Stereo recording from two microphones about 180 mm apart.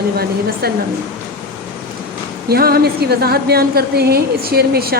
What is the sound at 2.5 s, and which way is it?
A woman's voice, 60° right (ahead or behind).